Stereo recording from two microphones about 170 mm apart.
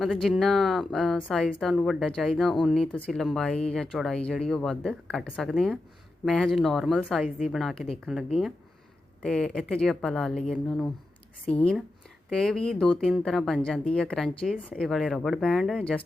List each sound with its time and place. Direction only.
0.0 s speech: centre (ahead or behind)
7.3 s a woman's voice: 50° left (ahead or behind)
7.5 s speech: centre (ahead or behind)